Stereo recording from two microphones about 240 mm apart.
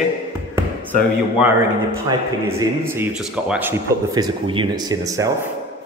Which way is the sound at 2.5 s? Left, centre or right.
Centre.